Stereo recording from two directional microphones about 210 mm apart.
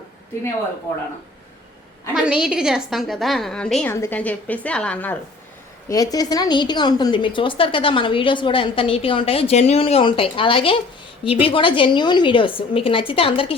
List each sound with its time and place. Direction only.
2.1 s a woman's voice: 5° right (ahead or behind)
5.9 s a woman's voice: 15° left (ahead or behind)